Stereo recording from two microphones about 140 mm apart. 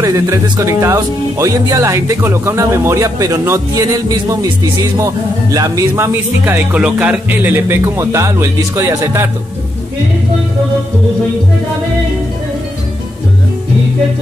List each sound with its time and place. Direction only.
0.0 s speech: 25° right (ahead or behind)